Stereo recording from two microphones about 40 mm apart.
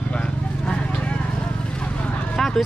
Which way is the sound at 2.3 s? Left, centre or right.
Centre.